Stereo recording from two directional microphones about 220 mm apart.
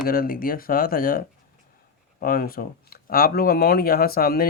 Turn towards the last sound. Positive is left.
turn(degrees=45)  # may be behind; listen again after turning